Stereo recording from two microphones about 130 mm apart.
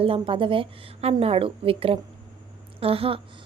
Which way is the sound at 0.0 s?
45° right (ahead or behind).